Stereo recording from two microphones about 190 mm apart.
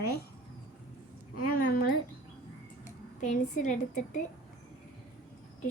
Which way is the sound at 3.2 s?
40° left (ahead or behind).